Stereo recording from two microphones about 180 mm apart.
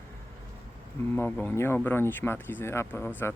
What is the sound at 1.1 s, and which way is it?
Speech, 10° left (ahead or behind).